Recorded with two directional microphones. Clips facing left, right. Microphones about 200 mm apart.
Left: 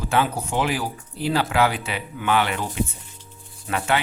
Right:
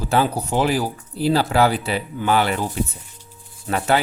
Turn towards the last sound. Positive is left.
turn(degrees=-35)  # may be behind; listen again after turning